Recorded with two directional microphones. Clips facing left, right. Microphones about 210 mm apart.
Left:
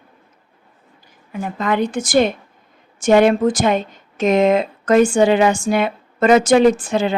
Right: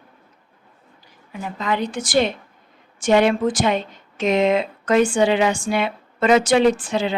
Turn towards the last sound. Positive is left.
turn(degrees=45)  # may be behind; listen again after turning